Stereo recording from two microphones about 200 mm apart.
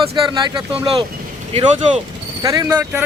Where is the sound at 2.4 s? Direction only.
20° right (ahead or behind).